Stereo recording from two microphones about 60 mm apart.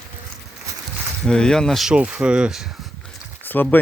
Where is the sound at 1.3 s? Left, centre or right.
Centre.